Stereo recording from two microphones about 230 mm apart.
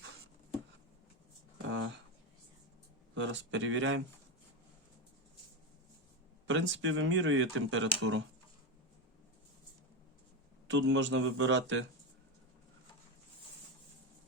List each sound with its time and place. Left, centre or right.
1.6 s a sound: right
3.2 s a man's voice: right
6.5 s speech: right
10.7 s a man's voice: right